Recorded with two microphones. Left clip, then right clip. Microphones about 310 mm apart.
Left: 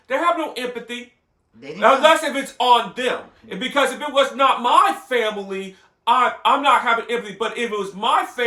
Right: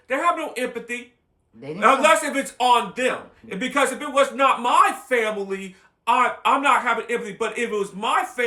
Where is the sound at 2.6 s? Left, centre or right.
Centre.